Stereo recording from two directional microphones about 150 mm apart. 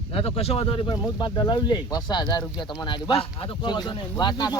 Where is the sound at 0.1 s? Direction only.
40° left (ahead or behind).